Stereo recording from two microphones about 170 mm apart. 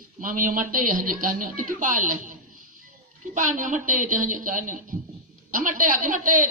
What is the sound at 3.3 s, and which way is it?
A man's voice, 50° right (ahead or behind).